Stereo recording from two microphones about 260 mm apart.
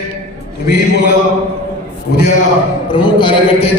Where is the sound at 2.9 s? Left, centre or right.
Centre.